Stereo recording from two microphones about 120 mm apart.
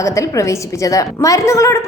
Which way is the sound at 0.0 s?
25° left (ahead or behind).